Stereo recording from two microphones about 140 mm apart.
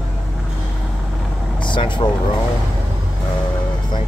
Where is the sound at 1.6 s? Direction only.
35° left (ahead or behind).